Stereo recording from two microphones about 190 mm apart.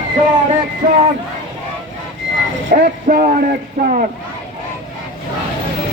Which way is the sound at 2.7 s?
50° right (ahead or behind).